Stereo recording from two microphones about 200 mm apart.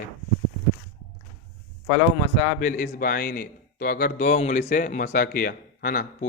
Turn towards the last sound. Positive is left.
turn(degrees=45)  # may be behind; listen again after turning